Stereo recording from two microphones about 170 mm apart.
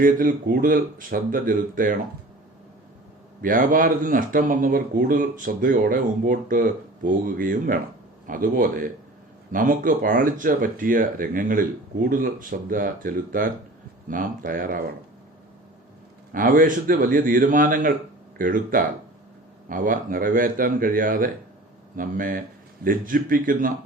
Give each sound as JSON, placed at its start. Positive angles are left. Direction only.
{"t": 0.0, "sound": "speech", "side_deg": -55}
{"t": 3.4, "sound": "a man's voice", "side_deg": -55}
{"t": 16.3, "sound": "a man's voice", "side_deg": -55}